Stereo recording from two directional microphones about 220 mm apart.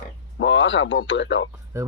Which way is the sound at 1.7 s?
15° right (ahead or behind).